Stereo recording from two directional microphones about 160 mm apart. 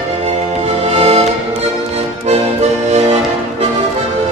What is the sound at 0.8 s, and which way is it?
Music, 40° right (ahead or behind).